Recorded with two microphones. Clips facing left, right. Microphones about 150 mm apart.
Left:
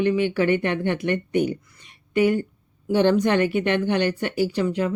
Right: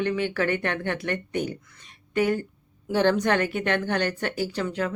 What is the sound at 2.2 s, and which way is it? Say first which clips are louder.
Speech: left 4 dB; 40° right (ahead or behind).